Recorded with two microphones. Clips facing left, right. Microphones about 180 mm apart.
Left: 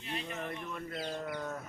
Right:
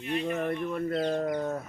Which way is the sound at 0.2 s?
50° right (ahead or behind).